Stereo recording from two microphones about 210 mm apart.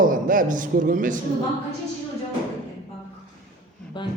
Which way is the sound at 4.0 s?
25° left (ahead or behind).